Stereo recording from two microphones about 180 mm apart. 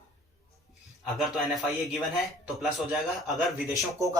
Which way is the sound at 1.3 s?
Centre (ahead or behind).